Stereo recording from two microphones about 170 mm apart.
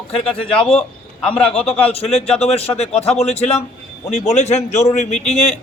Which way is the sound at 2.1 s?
35° left (ahead or behind).